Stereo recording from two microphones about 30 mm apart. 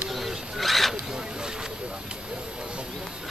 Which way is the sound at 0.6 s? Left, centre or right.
Centre.